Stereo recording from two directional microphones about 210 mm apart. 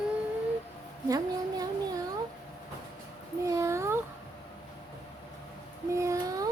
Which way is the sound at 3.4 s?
15° right (ahead or behind).